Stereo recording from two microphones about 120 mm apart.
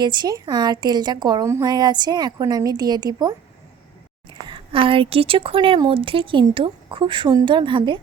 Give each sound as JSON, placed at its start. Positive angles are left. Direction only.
{"t": 0.0, "sound": "a woman's voice", "side_deg": -40}